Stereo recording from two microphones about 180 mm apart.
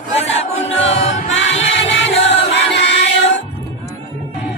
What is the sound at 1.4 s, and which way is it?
Music, 90° left.